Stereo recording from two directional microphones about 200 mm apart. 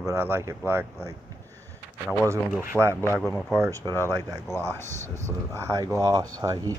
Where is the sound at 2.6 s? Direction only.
10° right (ahead or behind).